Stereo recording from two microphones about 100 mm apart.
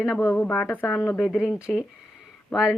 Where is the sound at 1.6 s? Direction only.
10° right (ahead or behind).